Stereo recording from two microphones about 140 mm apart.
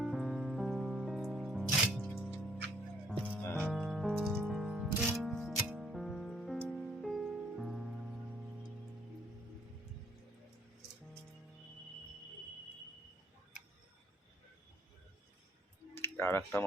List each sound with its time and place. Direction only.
0.0 s music: centre (ahead or behind)
3.2 s music: 10° right (ahead or behind)
16.0 s speech: 15° left (ahead or behind)